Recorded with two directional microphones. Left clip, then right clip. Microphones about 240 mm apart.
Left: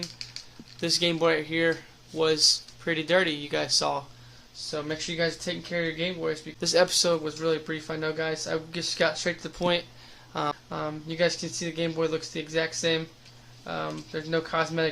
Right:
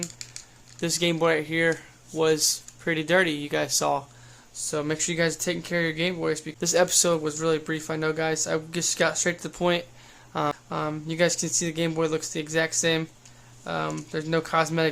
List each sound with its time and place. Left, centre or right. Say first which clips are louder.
0.8 s speech: even; centre
4.7 s speech: right 4 dB; right
6.6 s speech: even; centre